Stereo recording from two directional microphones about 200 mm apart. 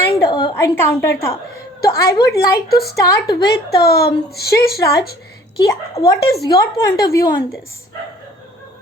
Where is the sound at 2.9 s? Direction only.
15° left (ahead or behind).